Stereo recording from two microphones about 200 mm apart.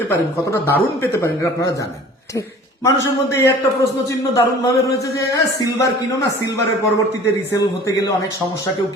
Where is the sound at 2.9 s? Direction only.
15° left (ahead or behind).